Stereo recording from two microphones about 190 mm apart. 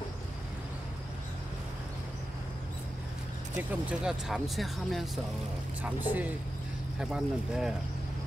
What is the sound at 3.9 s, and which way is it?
Speech, 5° right (ahead or behind).